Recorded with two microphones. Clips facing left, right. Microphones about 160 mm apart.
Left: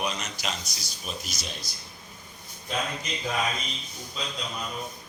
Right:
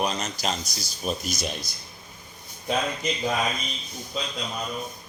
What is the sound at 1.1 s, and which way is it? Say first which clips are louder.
Speech: right 8 dB; 50° right (ahead or behind).